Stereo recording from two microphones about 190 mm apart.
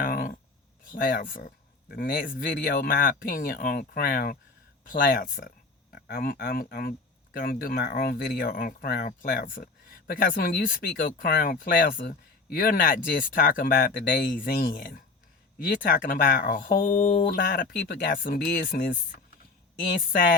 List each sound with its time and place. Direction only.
0.0 s a sound: 50° left (ahead or behind)
0.9 s speech: 45° left (ahead or behind)
17.3 s speech: 50° left (ahead or behind)